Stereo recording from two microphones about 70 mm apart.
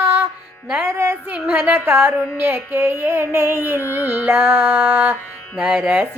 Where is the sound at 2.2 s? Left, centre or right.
Right.